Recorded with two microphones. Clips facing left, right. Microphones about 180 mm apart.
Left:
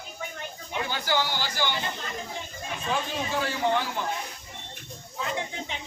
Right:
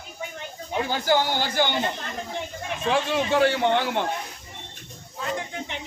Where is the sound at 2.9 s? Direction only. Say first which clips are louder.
Right 7 dB; 75° right (ahead or behind).